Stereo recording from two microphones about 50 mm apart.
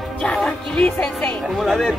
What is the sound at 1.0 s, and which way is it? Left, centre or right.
Speech, left.